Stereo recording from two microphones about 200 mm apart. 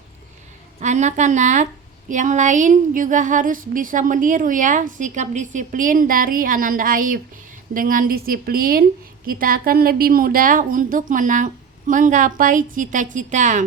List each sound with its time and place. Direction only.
0.8 s a woman's voice: 35° right (ahead or behind)